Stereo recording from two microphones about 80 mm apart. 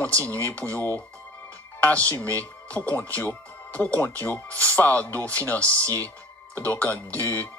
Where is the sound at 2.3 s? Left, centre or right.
Centre.